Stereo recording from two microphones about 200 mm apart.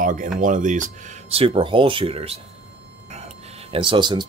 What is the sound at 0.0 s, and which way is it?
Speech, 40° right (ahead or behind).